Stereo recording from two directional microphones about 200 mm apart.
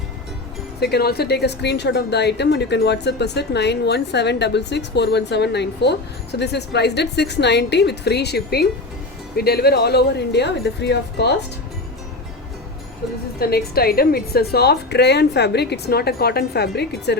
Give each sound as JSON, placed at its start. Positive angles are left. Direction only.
{"t": 0.8, "sound": "speech", "side_deg": 55}
{"t": 13.4, "sound": "a woman's voice", "side_deg": 50}